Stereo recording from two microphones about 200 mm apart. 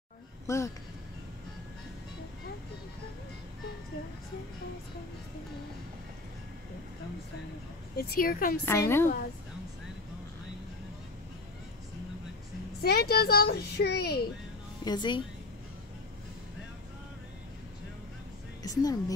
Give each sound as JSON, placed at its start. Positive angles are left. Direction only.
{"t": 0.5, "sound": "a woman's voice", "side_deg": 15}
{"t": 8.0, "sound": "speech", "side_deg": 50}
{"t": 8.6, "sound": "a woman's voice", "side_deg": 15}
{"t": 12.8, "sound": "a child's voice", "side_deg": 50}
{"t": 14.9, "sound": "speech", "side_deg": 25}
{"t": 18.6, "sound": "speech", "side_deg": 20}